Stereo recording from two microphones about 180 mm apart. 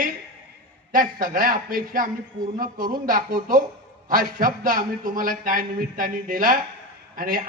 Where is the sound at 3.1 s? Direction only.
50° right (ahead or behind).